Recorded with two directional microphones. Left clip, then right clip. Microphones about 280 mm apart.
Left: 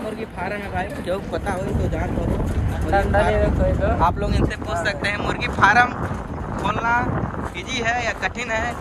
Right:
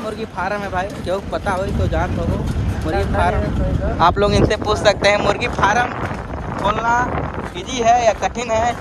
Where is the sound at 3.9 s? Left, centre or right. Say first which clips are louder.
Right 6 dB; right.